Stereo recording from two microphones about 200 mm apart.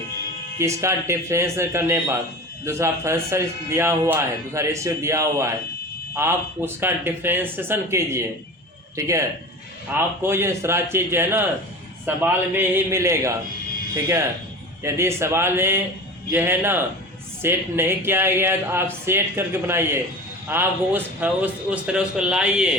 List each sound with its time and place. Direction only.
0.6 s a man's voice: 15° right (ahead or behind)